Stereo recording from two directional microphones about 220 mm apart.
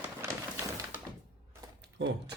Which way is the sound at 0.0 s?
10° right (ahead or behind).